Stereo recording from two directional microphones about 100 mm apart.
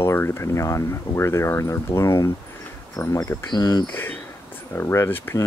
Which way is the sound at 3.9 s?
20° left (ahead or behind).